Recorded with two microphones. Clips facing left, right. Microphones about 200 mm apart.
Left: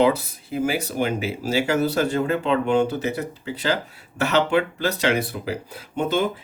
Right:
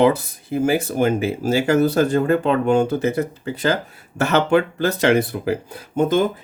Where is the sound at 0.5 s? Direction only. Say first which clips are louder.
Right 5 dB; 50° right (ahead or behind).